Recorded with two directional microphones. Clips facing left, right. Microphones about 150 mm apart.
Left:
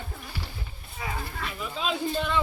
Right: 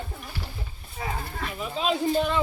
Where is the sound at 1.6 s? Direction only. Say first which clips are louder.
Right 4 dB; centre (ahead or behind).